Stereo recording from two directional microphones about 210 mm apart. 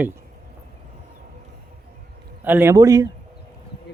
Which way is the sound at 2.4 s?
10° right (ahead or behind).